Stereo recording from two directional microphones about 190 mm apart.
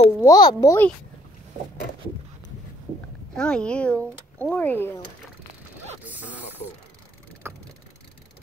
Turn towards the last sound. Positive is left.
turn(degrees=-10)  # may be behind; listen again after turning